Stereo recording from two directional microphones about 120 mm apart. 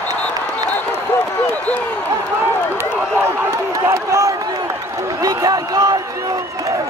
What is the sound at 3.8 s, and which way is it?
A man's voice, 25° right (ahead or behind).